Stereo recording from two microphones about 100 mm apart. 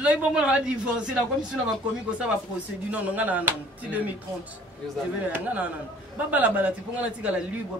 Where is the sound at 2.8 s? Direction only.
15° right (ahead or behind).